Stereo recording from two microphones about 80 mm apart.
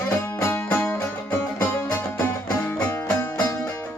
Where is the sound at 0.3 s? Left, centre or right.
Left.